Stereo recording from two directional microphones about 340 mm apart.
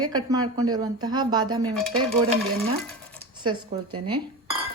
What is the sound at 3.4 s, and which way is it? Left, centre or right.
Dishes, centre.